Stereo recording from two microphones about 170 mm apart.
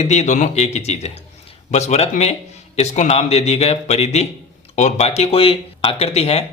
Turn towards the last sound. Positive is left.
turn(degrees=35)  # may be behind; listen again after turning